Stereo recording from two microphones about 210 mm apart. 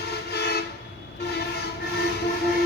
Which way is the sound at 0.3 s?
50° left (ahead or behind).